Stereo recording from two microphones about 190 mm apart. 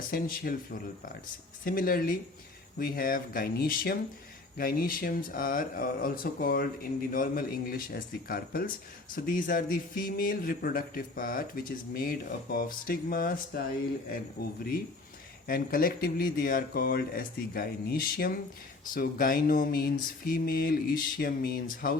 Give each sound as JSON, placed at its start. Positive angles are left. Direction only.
{"t": 0.1, "sound": "speech", "side_deg": 50}
{"t": 15.4, "sound": "speech", "side_deg": 50}